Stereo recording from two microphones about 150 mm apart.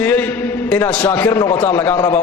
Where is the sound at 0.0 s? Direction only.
10° left (ahead or behind).